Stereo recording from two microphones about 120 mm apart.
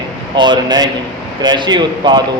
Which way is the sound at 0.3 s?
35° right (ahead or behind).